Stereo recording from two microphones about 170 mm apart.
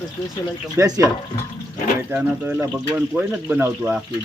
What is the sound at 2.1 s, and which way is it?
Speech, 10° right (ahead or behind).